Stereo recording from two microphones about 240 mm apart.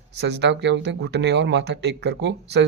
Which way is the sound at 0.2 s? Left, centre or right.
Right.